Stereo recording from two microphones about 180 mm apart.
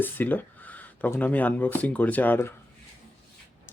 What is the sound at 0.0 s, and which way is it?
Speech, 10° left (ahead or behind).